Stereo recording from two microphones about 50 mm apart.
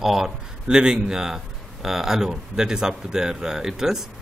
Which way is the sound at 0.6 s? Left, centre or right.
Centre.